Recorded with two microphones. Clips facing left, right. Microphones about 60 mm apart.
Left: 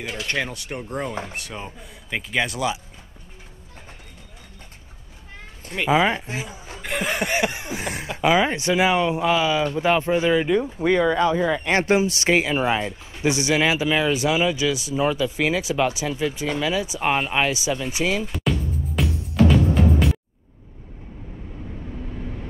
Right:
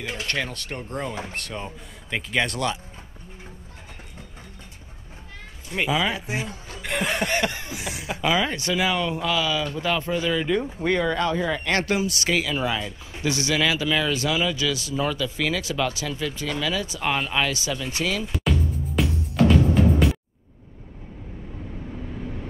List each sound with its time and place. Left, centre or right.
0.3 s speech: centre
5.9 s speech: left
6.1 s speech: centre
6.8 s chuckle: centre
7.7 s a sound: left
8.2 s speech: left
10.5 s speech: centre
18.2 s music: centre